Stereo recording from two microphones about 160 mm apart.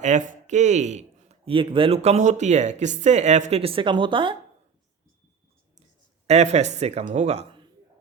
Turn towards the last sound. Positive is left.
turn(degrees=-45)  # may be behind; listen again after turning